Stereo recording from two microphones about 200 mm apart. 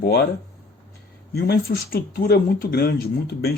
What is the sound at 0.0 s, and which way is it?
Speech, 55° left (ahead or behind).